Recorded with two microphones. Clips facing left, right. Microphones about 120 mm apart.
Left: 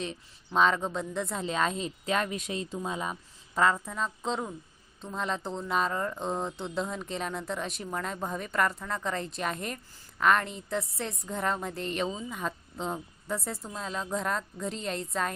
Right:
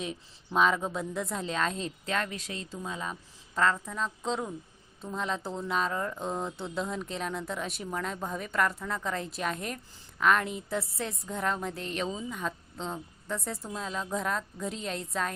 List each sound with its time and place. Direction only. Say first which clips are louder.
0.0 s speech: even; 5° right (ahead or behind); by 3.1 s 20° left (ahead or behind)
3.1 s speech: left 2 dB; 10° left (ahead or behind)